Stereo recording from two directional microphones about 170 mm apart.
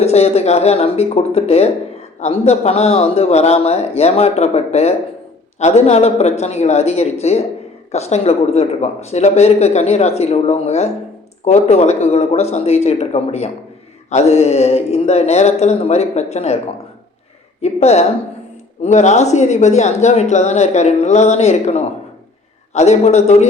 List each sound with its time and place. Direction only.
0.0 s speech: 40° left (ahead or behind)
17.6 s speech: 40° left (ahead or behind)